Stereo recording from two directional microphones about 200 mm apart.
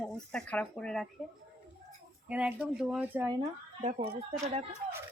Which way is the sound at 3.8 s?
35° right (ahead or behind).